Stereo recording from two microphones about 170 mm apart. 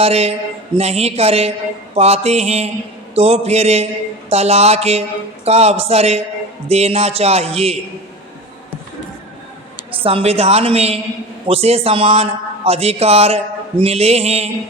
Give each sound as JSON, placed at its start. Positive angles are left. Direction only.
{"t": 0.0, "sound": "a man's voice", "side_deg": -40}
{"t": 9.9, "sound": "a man's voice", "side_deg": -35}